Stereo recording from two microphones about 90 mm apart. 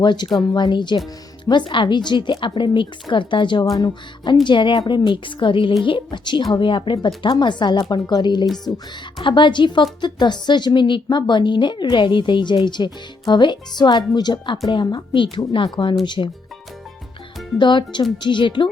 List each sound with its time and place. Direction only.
0.0 s a woman's voice: 55° left (ahead or behind)
17.6 s a woman's voice: 60° left (ahead or behind)